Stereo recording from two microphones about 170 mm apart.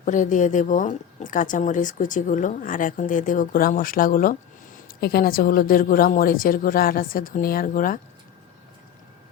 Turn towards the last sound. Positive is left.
turn(degrees=55)  # may be behind; listen again after turning